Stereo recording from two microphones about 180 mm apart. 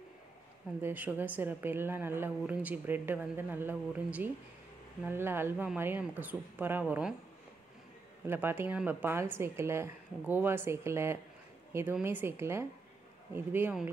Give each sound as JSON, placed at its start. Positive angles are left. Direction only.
{"t": 0.8, "sound": "a woman's voice", "side_deg": -10}
{"t": 8.3, "sound": "a woman's voice", "side_deg": -10}